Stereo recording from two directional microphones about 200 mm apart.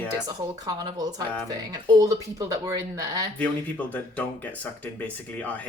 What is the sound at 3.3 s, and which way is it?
Speech, 10° left (ahead or behind).